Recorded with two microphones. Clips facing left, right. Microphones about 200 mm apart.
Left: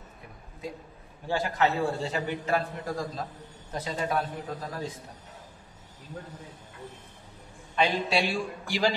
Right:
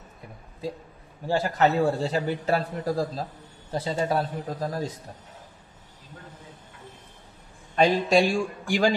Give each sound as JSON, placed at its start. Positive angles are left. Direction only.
{"t": 1.2, "sound": "a man's voice", "side_deg": -40}
{"t": 7.7, "sound": "a man's voice", "side_deg": -45}